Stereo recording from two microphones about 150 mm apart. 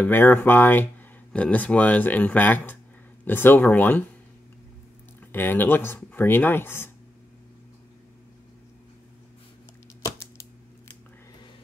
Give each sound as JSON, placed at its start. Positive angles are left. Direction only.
{"t": 0.0, "sound": "speech", "side_deg": 15}
{"t": 5.3, "sound": "speech", "side_deg": 15}